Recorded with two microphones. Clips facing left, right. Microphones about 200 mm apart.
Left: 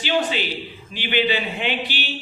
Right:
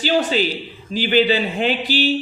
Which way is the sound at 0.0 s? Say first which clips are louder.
Right 4 dB; 40° right (ahead or behind).